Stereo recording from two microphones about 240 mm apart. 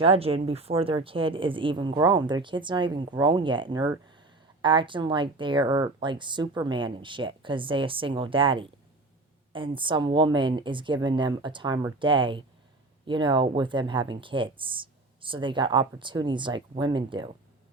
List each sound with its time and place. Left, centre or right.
0.0 s speech: right